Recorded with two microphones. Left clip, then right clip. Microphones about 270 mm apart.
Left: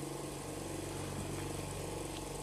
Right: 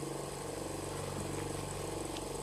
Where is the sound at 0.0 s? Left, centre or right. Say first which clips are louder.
Right 2 dB; right.